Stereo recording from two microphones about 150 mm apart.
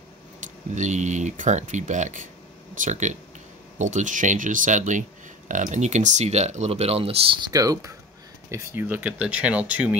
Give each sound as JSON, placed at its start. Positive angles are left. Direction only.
{"t": 0.7, "sound": "speech", "side_deg": -50}